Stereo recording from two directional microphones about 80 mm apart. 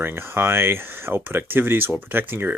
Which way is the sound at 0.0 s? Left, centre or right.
Right.